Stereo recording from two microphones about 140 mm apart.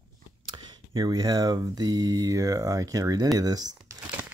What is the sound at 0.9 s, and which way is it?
Speech, 30° right (ahead or behind).